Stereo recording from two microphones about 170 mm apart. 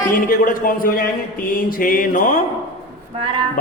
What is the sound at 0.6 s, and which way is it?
Mantra, 55° left (ahead or behind).